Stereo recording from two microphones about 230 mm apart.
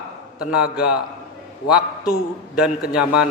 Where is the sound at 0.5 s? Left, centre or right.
Centre.